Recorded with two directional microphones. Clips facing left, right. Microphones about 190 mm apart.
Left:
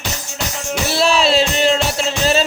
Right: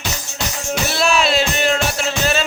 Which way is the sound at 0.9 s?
35° left (ahead or behind).